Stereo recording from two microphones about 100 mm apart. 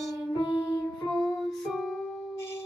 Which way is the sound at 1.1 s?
Centre (ahead or behind).